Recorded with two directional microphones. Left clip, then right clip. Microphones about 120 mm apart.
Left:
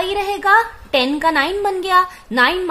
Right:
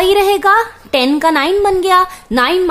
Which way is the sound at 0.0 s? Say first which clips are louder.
Right 8 dB; 45° right (ahead or behind).